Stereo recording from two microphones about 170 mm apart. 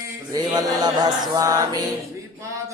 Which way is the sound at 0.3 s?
20° right (ahead or behind).